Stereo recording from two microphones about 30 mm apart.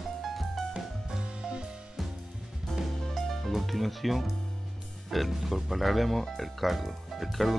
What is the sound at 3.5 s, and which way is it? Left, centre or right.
Speech, centre.